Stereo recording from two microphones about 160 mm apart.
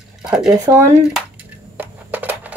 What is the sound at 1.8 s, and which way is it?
Crushing, 10° right (ahead or behind).